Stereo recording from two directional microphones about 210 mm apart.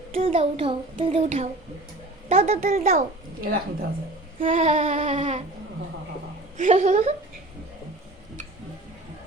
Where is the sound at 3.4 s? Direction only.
45° right (ahead or behind).